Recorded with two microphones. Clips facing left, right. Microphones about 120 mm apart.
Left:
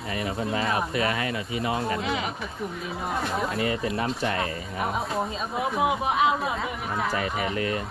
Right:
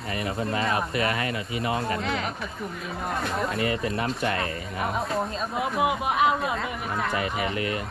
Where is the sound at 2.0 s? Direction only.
5° left (ahead or behind).